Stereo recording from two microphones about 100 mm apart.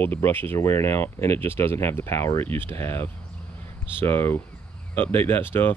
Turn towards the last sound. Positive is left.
turn(degrees=20)  # may be behind; listen again after turning